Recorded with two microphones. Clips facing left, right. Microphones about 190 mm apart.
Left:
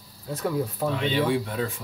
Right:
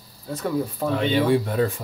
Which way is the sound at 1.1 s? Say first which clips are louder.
Right 5 dB; 45° right (ahead or behind).